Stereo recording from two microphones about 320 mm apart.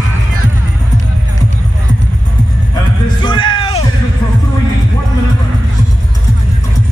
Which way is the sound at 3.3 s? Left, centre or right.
Centre.